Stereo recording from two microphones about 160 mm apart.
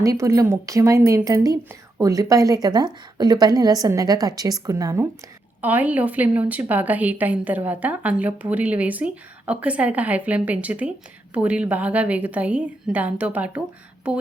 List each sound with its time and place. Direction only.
0.0 s a woman's voice: 20° right (ahead or behind)